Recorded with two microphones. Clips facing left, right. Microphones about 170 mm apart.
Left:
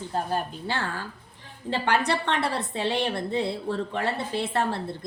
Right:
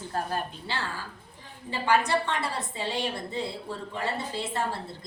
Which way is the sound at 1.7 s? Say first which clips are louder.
Even; 70° left (ahead or behind).